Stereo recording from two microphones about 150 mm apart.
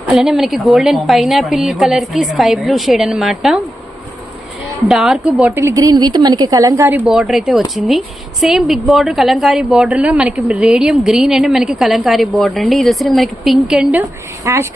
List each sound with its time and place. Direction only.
0.1 s a woman's voice: centre (ahead or behind)
4.9 s a woman's voice: 5° right (ahead or behind)
7.0 s a woman's voice: centre (ahead or behind)
14.4 s speech: 20° right (ahead or behind)